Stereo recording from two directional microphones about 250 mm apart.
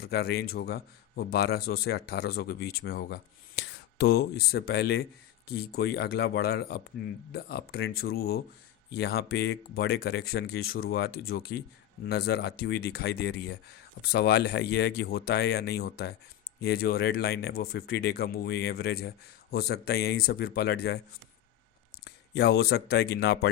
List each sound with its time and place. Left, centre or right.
0.0 s a man's voice: left
22.0 s speech: left